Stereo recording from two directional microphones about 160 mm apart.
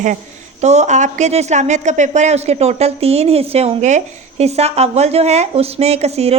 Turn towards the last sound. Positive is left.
turn(degrees=-40)  # may be behind; listen again after turning